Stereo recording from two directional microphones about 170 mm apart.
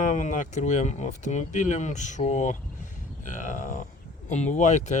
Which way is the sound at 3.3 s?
45° left (ahead or behind).